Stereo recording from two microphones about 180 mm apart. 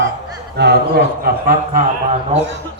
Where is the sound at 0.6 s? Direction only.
75° right (ahead or behind).